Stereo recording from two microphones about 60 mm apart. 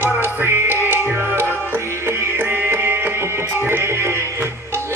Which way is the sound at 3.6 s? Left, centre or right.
Right.